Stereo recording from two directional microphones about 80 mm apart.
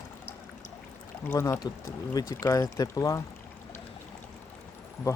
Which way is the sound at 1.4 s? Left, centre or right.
Left.